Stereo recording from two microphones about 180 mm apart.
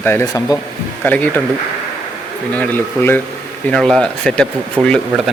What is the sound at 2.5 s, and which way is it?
Speech, 10° left (ahead or behind).